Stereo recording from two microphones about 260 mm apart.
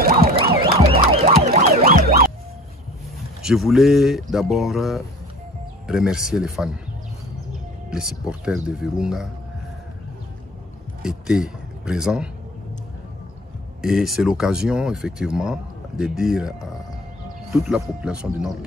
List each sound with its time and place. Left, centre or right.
0.7 s emergency vehicle: right
3.4 s speech: centre
7.9 s speech: centre
11.0 s a man's voice: centre
13.7 s speech: centre